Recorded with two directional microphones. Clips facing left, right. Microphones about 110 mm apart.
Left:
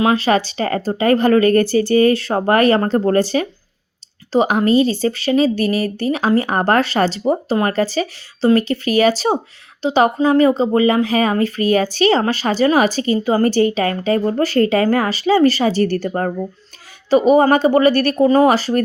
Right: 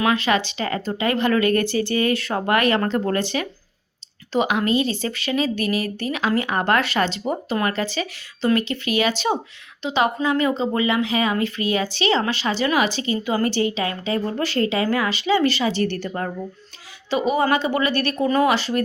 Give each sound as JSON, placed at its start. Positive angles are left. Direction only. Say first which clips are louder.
{"t": 0.0, "sound": "speech", "louder": "left 5 dB", "side_deg": 30}